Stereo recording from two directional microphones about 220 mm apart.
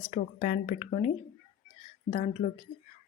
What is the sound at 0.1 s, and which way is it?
Speech, 30° left (ahead or behind).